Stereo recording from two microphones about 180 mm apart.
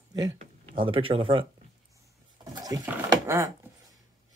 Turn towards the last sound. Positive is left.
turn(degrees=-15)  # may be behind; listen again after turning